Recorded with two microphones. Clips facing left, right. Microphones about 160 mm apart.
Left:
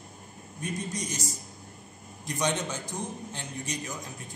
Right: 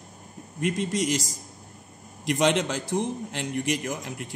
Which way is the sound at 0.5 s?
90° right.